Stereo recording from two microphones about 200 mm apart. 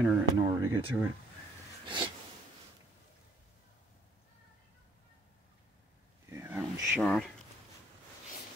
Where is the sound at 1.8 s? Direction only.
25° right (ahead or behind).